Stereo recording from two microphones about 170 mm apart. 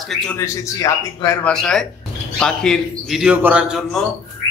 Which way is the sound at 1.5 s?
5° left (ahead or behind).